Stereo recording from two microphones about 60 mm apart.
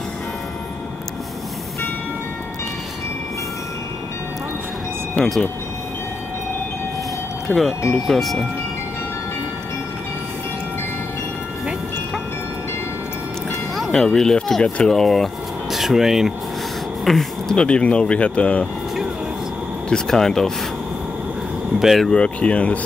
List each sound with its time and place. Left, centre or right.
5.1 s speech: centre
7.5 s speech: left
8.1 s speech: centre
13.9 s speech: centre
17.0 s a sound: centre
17.6 s speech: centre
19.9 s speech: centre
21.7 s speech: centre
22.1 s speech: centre